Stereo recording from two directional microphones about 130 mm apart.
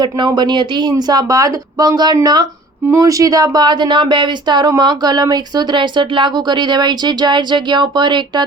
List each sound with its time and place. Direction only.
0.0 s speech: 30° right (ahead or behind)